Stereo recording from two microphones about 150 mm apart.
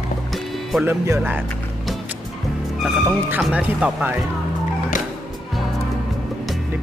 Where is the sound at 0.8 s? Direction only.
15° right (ahead or behind).